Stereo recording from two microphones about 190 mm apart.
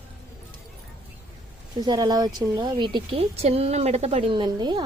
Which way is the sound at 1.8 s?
20° right (ahead or behind).